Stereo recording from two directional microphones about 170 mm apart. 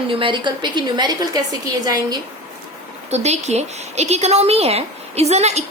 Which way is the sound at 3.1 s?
40° right (ahead or behind).